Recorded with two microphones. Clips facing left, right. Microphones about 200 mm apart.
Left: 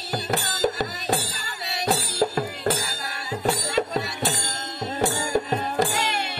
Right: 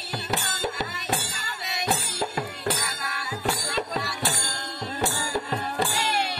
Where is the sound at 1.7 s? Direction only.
35° left (ahead or behind).